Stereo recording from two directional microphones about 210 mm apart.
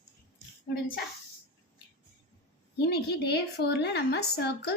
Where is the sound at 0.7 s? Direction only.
45° left (ahead or behind).